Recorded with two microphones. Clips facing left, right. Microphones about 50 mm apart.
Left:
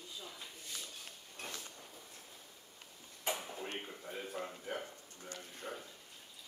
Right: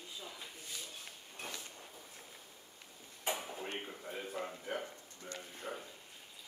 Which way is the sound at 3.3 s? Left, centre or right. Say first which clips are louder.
Right 1 dB; centre.